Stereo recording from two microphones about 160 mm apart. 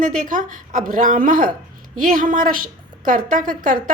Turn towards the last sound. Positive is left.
turn(degrees=-55)  # may be behind; listen again after turning